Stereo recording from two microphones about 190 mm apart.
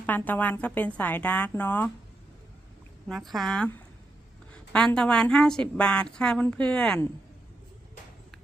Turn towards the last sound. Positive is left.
turn(degrees=5)  # may be behind; listen again after turning